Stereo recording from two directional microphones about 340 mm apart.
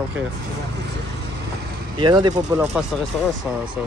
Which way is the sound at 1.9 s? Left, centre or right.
Centre.